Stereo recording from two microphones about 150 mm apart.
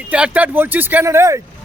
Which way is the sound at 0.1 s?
10° right (ahead or behind).